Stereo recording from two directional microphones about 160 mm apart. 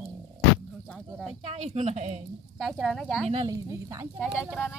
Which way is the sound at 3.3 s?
25° right (ahead or behind).